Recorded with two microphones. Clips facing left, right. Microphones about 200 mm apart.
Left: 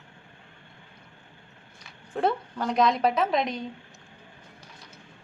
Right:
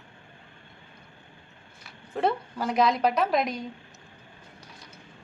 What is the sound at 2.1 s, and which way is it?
A woman's voice, 5° right (ahead or behind).